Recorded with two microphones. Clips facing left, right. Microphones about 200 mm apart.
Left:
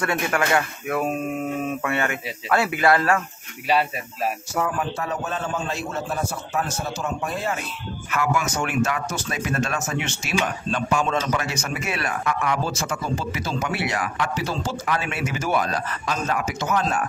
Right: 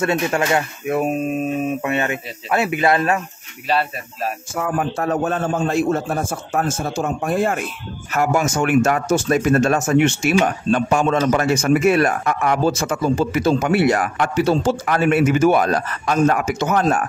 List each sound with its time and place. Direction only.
0.0 s speech: 25° right (ahead or behind)
3.6 s speech: 10° left (ahead or behind)
4.6 s speech: 50° right (ahead or behind)